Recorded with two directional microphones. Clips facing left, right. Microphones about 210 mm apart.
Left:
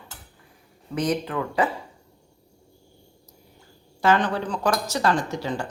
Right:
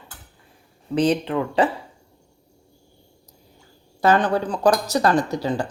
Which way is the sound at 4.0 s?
35° right (ahead or behind).